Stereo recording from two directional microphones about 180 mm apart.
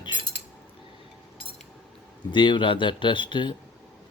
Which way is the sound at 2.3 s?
25° left (ahead or behind).